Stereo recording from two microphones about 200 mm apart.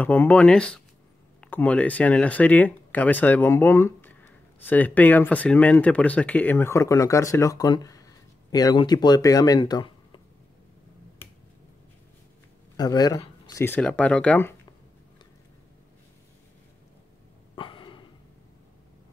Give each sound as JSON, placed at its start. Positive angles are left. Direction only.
{"t": 0.0, "sound": "speech", "side_deg": 10}
{"t": 12.7, "sound": "speech", "side_deg": 20}
{"t": 17.6, "sound": "a sound", "side_deg": 25}